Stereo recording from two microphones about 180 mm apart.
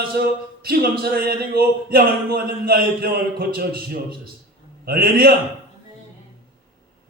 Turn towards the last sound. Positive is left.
turn(degrees=-55)  # may be behind; listen again after turning